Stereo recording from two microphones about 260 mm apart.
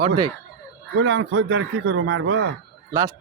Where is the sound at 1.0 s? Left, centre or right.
Right.